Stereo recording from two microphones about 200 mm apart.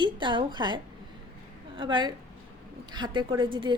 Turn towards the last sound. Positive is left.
turn(degrees=-25)  # may be behind; listen again after turning